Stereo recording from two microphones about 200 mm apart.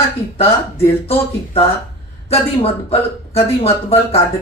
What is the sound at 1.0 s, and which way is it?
Speech, 30° left (ahead or behind).